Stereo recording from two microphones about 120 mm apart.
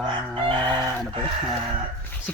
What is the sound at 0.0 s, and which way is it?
Crowing, 45° right (ahead or behind).